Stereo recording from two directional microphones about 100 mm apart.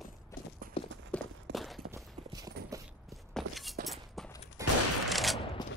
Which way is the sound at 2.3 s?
40° right (ahead or behind).